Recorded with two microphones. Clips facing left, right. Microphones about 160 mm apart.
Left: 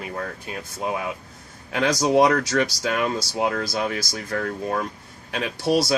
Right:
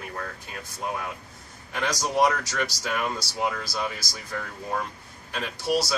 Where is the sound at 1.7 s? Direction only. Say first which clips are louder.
Left 7 dB; 90° left.